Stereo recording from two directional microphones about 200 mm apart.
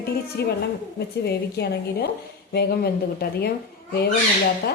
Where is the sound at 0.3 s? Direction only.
55° left (ahead or behind).